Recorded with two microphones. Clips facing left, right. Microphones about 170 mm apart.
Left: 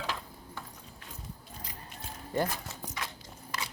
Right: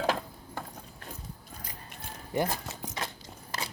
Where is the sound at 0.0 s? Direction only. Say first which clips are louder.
Right 8 dB; 50° right (ahead or behind).